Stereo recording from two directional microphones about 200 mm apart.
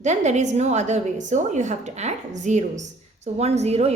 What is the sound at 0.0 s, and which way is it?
A woman's voice, 35° right (ahead or behind).